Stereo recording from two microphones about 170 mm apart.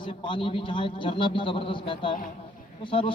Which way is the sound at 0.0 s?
30° left (ahead or behind).